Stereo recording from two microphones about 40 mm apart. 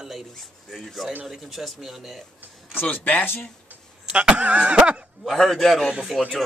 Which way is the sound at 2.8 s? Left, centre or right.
Left.